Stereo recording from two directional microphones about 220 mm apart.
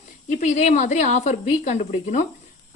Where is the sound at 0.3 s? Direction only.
35° left (ahead or behind).